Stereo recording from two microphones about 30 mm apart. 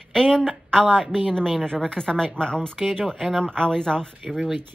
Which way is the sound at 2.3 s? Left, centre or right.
Left.